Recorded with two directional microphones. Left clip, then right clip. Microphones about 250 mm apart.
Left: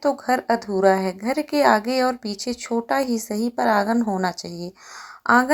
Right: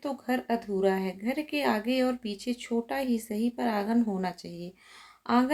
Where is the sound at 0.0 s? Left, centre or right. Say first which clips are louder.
Left 11 dB; centre.